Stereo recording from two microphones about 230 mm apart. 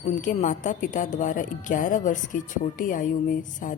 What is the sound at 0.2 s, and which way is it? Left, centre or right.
A woman's voice, left.